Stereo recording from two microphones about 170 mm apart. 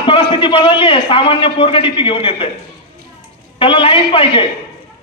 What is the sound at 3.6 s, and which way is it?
Speech, 30° left (ahead or behind).